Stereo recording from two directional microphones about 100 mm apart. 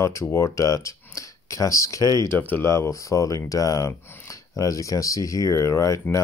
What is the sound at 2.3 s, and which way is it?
Speech, 20° left (ahead or behind).